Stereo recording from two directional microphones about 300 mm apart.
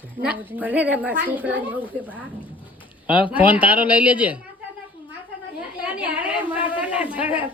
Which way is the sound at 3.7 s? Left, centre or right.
Centre.